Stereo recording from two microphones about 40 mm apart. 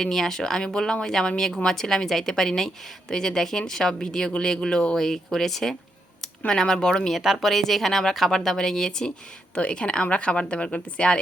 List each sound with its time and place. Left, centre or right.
0.0 s a woman's voice: centre
4.9 s a woman's voice: centre
7.2 s speech: centre
7.4 s a woman's voice: centre
9.6 s a woman's voice: left